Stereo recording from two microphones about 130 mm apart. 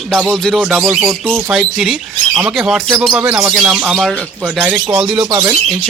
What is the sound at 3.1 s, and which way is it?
Speech, 15° right (ahead or behind).